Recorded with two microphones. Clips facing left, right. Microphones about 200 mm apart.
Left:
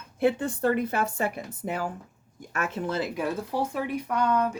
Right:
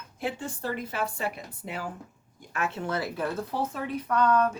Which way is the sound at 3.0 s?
15° left (ahead or behind).